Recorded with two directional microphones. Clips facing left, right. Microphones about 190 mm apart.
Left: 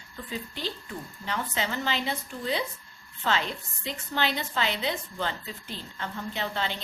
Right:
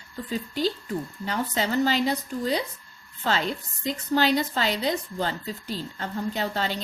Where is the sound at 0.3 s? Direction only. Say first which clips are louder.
Right 8 dB; 40° right (ahead or behind).